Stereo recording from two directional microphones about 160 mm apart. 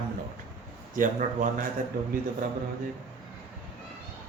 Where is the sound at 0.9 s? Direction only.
55° right (ahead or behind).